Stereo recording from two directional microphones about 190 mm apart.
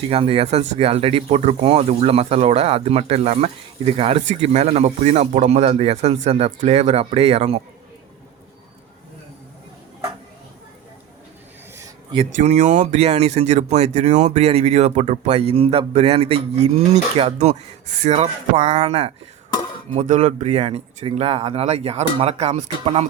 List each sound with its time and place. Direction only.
0.1 s speech: 30° right (ahead or behind)
12.1 s speech: 35° right (ahead or behind)